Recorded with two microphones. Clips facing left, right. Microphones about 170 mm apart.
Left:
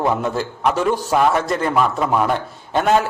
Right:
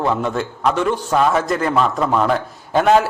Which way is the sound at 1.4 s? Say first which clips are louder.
Right 1 dB; centre (ahead or behind).